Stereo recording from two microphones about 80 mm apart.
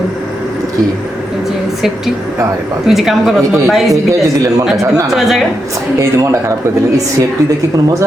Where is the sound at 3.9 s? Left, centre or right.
Right.